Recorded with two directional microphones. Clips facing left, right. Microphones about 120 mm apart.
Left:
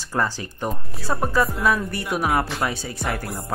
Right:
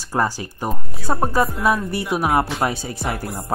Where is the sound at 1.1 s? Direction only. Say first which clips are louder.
Right 3 dB; 25° right (ahead or behind).